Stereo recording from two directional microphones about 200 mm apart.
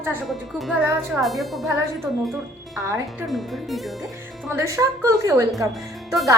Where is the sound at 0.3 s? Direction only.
Centre (ahead or behind).